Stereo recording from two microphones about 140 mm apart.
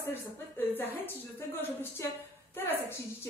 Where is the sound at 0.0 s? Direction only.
15° left (ahead or behind).